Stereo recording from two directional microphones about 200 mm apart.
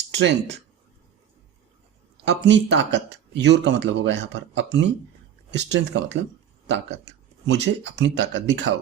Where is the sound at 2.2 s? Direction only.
60° right (ahead or behind).